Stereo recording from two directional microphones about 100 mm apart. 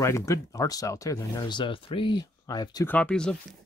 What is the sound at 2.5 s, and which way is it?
Speech, 40° left (ahead or behind).